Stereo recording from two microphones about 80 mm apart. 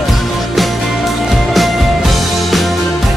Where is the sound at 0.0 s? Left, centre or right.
Centre.